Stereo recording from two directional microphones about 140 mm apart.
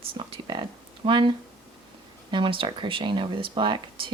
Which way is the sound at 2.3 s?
35° right (ahead or behind).